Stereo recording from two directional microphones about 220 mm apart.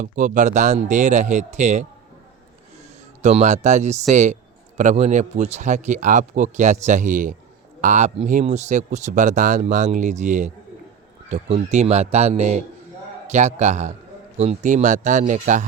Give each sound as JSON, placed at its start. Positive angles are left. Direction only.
{"t": 0.0, "sound": "speech", "side_deg": -35}
{"t": 3.2, "sound": "speech", "side_deg": -30}